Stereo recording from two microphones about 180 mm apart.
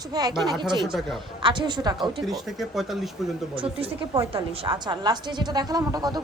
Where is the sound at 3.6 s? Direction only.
30° right (ahead or behind).